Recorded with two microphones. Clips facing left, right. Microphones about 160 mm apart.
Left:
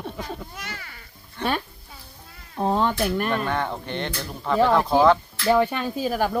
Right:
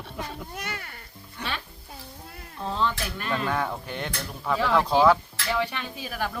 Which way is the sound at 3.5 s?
5° right (ahead or behind).